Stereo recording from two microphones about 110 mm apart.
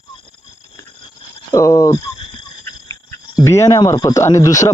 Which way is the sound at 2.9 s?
25° left (ahead or behind).